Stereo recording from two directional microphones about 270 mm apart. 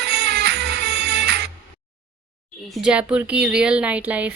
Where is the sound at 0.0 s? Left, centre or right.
Right.